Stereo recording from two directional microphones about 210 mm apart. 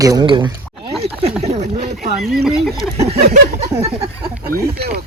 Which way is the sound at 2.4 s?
Centre (ahead or behind).